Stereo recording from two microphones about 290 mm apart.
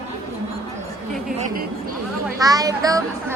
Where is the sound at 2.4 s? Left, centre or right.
Centre.